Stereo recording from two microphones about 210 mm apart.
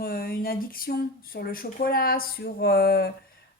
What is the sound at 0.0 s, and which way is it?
Speech, 45° left (ahead or behind).